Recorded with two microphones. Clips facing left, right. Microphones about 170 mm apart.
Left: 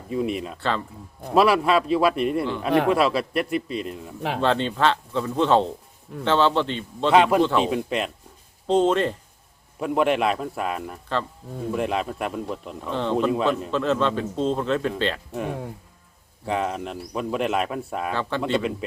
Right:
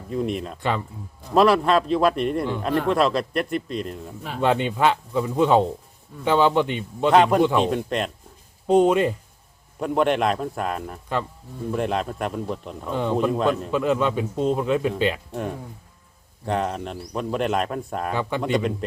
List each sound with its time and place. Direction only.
0.1 s a man's voice: 5° left (ahead or behind)
2.6 s a man's voice: 70° left (ahead or behind)
2.9 s speech: 5° left (ahead or behind)
4.4 s speech: 10° right (ahead or behind)
7.1 s speech: 5° left (ahead or behind)
8.6 s speech: 10° right (ahead or behind)
9.8 s speech: 5° left (ahead or behind)
16.5 s speech: centre (ahead or behind)
18.1 s speech: 15° right (ahead or behind)
18.8 s speech: 5° left (ahead or behind)